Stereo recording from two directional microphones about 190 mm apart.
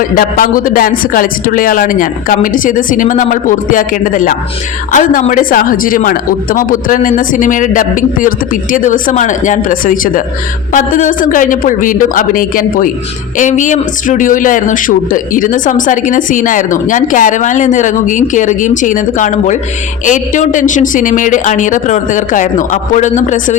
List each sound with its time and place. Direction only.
0.2 s a man's voice: 45° left (ahead or behind)